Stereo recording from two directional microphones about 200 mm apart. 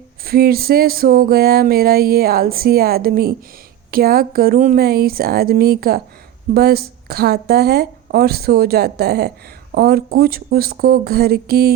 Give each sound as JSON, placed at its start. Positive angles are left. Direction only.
{"t": 0.3, "sound": "speech", "side_deg": -50}